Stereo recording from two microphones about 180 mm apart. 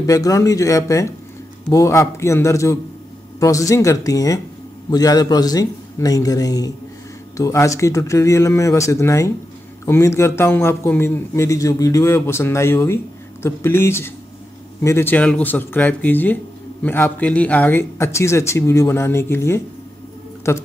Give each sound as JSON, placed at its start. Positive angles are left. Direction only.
{"t": 0.0, "sound": "a man's voice", "side_deg": 20}